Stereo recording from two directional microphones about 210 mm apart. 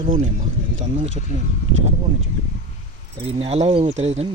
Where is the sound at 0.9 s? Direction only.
30° right (ahead or behind).